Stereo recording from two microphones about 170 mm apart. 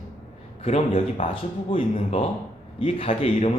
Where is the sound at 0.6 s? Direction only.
35° left (ahead or behind).